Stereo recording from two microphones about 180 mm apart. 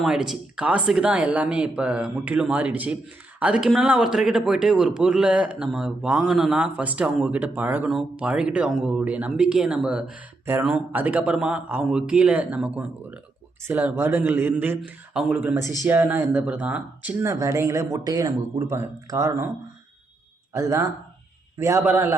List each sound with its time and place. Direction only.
0.0 s speech: centre (ahead or behind); by 19.5 s 15° right (ahead or behind)
20.5 s speech: 15° right (ahead or behind)